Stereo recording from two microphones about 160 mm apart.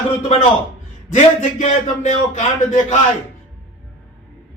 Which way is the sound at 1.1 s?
50° left (ahead or behind).